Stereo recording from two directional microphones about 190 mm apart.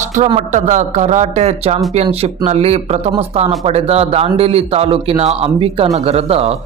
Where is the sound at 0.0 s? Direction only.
40° right (ahead or behind).